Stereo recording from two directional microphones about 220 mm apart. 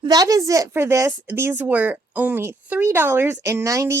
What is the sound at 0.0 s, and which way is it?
A woman's voice, 15° right (ahead or behind).